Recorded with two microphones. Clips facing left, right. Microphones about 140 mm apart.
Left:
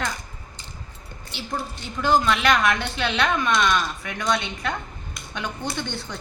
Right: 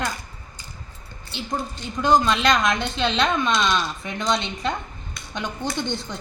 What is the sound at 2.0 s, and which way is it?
Speech, 20° right (ahead or behind).